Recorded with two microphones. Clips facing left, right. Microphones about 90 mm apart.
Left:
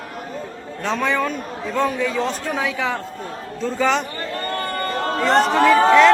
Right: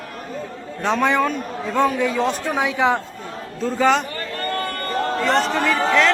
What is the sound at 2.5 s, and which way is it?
Speech, 25° right (ahead or behind).